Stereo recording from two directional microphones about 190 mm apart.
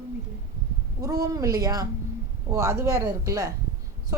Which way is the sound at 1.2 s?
15° right (ahead or behind).